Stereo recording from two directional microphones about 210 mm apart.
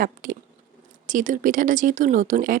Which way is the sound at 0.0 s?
40° right (ahead or behind).